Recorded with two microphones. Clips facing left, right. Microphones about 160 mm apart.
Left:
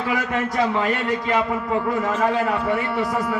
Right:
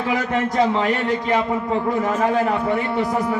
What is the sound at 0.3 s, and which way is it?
A man's voice, 25° right (ahead or behind).